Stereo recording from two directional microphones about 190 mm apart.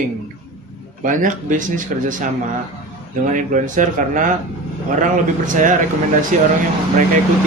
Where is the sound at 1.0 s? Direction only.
45° right (ahead or behind).